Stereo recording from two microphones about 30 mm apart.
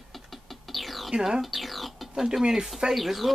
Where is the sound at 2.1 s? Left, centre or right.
Centre.